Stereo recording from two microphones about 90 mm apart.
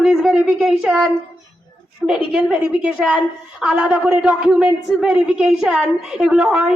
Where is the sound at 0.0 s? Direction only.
5° right (ahead or behind).